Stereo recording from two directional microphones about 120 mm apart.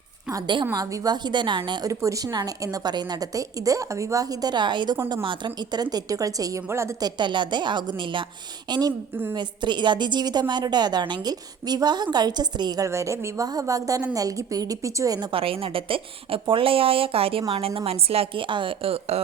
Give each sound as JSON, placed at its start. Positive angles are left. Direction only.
{"t": 0.3, "sound": "a woman's voice", "side_deg": -35}
{"t": 1.9, "sound": "a woman's voice", "side_deg": -25}
{"t": 7.0, "sound": "a woman's voice", "side_deg": -40}
{"t": 15.3, "sound": "a woman's voice", "side_deg": -50}